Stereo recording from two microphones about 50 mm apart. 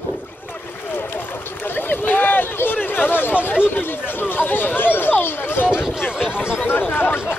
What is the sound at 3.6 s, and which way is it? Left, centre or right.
Speech, left.